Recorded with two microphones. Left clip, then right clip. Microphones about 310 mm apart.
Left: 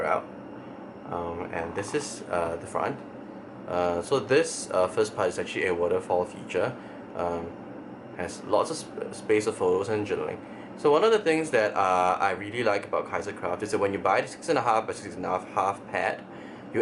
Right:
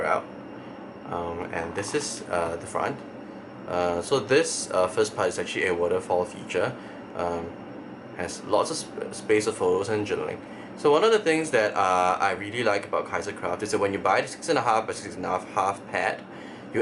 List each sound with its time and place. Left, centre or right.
1.4 s speech: centre
9.6 s speech: left
9.8 s speech: centre